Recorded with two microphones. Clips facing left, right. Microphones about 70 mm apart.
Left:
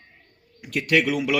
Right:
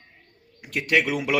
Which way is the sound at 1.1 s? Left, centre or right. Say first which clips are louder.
Left 1 dB; right.